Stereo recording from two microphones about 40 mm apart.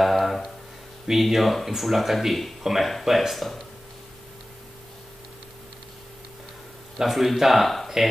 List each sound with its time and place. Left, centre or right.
0.0 s a sound: centre
1.0 s speech: centre
7.0 s speech: centre